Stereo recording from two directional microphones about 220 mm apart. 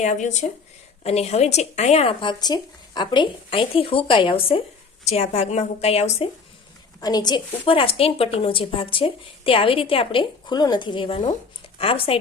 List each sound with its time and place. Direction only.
0.0 s a woman's voice: 35° left (ahead or behind)